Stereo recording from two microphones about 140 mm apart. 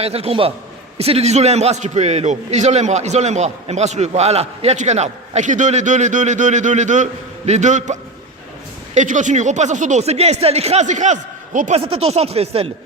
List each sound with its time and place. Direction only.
0.0 s a man's voice: 45° right (ahead or behind)
9.0 s a man's voice: 60° right (ahead or behind)
11.8 s speech: 45° right (ahead or behind)